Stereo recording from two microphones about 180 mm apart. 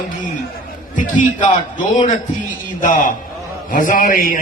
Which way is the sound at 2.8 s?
45° left (ahead or behind).